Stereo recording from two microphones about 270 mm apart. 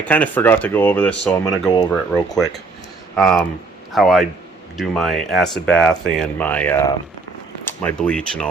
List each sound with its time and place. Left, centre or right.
0.0 s speech: centre